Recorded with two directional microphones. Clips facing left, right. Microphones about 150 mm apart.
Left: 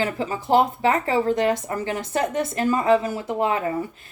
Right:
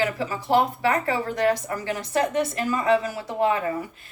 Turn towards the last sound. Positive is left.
turn(degrees=25)  # may be behind; listen again after turning